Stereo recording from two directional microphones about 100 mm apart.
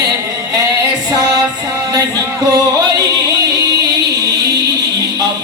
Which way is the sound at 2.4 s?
40° right (ahead or behind).